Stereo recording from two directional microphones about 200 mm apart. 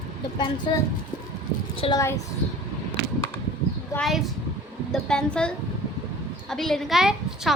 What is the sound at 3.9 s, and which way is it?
A woman's voice, centre (ahead or behind).